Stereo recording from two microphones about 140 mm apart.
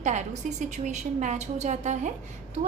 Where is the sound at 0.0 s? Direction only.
60° right (ahead or behind).